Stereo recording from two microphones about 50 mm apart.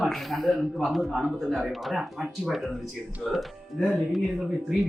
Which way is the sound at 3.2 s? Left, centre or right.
Left.